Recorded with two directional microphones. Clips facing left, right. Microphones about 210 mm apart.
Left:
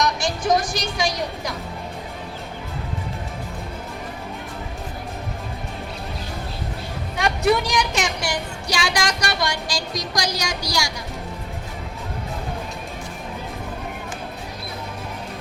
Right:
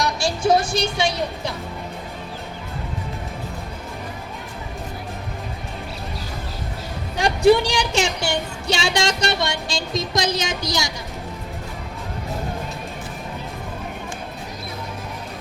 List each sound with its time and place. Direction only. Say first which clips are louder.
0.0 s music: right 1 dB; 30° right (ahead or behind)
0.7 s a woman's voice: right 3 dB; 25° right (ahead or behind)
7.2 s a woman's voice: right 5 dB; 30° right (ahead or behind)